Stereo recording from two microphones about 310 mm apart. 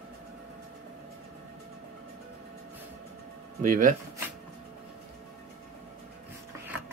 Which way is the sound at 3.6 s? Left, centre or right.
Right.